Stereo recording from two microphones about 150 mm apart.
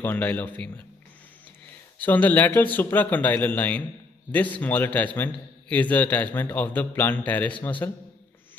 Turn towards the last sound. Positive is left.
turn(degrees=15)  # may be behind; listen again after turning